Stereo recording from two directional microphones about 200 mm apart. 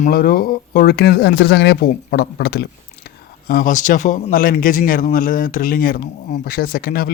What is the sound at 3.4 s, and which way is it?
Speech, 40° left (ahead or behind).